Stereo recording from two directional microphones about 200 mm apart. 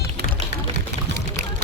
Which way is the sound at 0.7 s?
35° right (ahead or behind).